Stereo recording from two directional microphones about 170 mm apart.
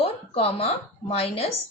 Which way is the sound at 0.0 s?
35° left (ahead or behind).